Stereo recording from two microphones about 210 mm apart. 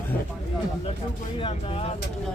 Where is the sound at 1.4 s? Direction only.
25° left (ahead or behind).